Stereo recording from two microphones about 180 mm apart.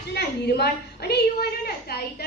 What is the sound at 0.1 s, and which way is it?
A woman's voice, 65° left (ahead or behind).